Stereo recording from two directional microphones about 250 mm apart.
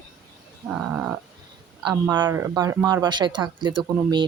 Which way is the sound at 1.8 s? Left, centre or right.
Centre.